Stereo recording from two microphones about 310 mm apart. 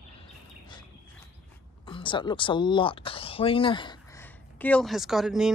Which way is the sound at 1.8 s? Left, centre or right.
Centre.